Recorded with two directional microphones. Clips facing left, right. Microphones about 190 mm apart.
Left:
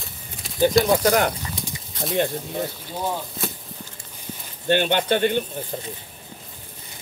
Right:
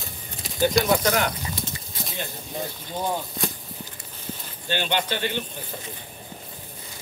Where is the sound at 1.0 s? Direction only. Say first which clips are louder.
Left 4 dB; 40° left (ahead or behind).